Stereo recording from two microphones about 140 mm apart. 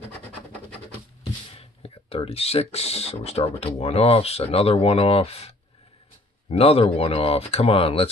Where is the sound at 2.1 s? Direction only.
45° left (ahead or behind).